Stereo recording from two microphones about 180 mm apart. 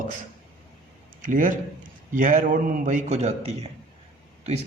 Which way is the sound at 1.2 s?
50° right (ahead or behind).